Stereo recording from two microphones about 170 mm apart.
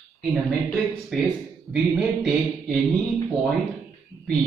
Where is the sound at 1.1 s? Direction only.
Centre (ahead or behind).